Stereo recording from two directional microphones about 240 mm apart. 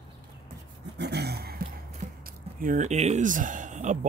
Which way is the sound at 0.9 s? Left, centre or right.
Right.